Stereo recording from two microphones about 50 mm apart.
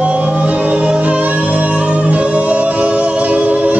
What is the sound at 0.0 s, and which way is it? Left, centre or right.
Music, right.